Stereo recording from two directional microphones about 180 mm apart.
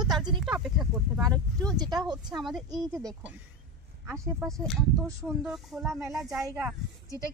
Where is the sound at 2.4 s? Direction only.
Centre (ahead or behind).